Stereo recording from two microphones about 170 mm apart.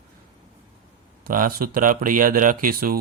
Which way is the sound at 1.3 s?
55° right (ahead or behind).